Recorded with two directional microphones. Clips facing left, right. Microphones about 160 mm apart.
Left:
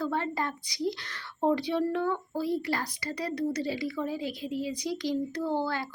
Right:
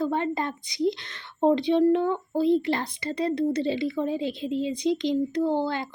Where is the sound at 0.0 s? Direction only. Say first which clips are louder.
Right 4 dB; 20° right (ahead or behind).